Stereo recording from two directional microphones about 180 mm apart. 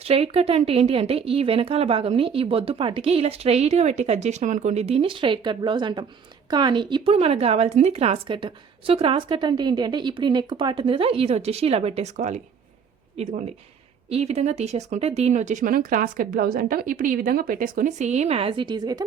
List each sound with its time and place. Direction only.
0.0 s speech: 35° right (ahead or behind)